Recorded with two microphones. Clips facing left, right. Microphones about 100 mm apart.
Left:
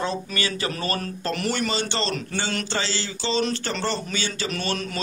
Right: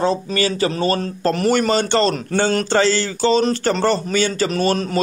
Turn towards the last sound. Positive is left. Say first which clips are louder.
# right 9 dB
turn(degrees=-35)  # may be behind; listen again after turning